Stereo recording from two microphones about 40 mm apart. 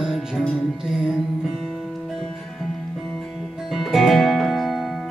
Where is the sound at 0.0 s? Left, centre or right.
Centre.